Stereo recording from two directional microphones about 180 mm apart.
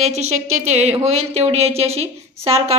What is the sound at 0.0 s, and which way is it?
A woman's voice, 40° right (ahead or behind).